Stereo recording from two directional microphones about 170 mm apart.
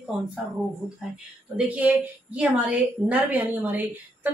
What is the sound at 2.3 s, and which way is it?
A woman's voice, 10° right (ahead or behind).